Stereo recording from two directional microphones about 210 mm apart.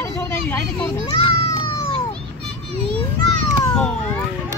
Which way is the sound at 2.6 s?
30° right (ahead or behind).